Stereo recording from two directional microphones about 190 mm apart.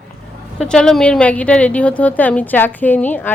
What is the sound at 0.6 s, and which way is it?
A woman's voice, 5° left (ahead or behind).